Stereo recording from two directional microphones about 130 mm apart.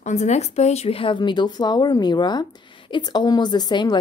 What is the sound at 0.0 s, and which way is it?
A woman's voice, 60° left (ahead or behind).